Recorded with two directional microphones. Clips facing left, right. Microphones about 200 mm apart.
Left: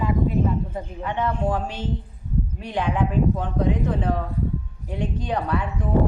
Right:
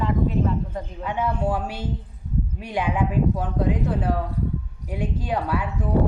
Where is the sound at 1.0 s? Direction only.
10° right (ahead or behind).